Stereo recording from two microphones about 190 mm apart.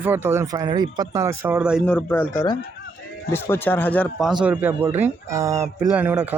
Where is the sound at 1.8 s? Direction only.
10° left (ahead or behind).